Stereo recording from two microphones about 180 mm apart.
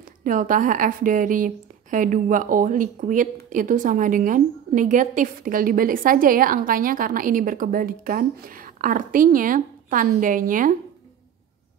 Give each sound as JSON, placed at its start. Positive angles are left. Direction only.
{"t": 0.2, "sound": "a woman's voice", "side_deg": -45}